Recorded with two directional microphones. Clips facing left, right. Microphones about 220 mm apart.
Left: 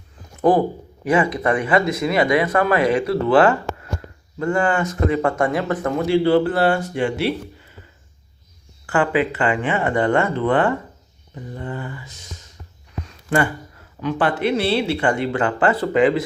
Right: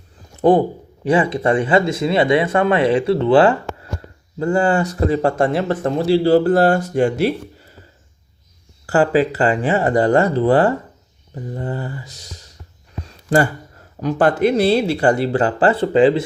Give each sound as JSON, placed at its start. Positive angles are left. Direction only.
{"t": 1.0, "sound": "speech", "side_deg": -30}
{"t": 8.9, "sound": "speech", "side_deg": -35}
{"t": 13.1, "sound": "a sound", "side_deg": -35}
{"t": 14.0, "sound": "speech", "side_deg": -40}